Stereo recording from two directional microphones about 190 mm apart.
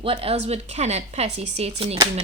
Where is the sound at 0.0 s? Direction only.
30° right (ahead or behind).